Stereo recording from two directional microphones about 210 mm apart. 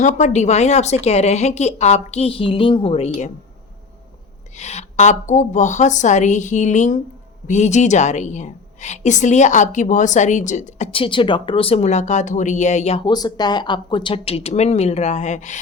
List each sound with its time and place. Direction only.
0.0 s a woman's voice: 35° left (ahead or behind)
4.5 s a woman's voice: 30° left (ahead or behind)